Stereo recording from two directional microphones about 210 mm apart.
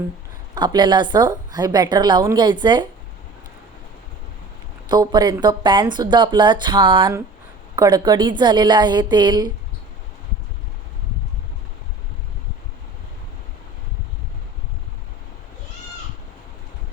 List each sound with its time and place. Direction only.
0.5 s speech: 20° right (ahead or behind)
4.9 s speech: 20° right (ahead or behind)